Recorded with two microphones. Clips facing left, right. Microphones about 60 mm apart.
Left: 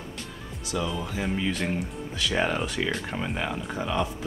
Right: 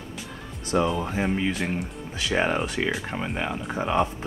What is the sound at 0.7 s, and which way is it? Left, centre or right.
Speech, right.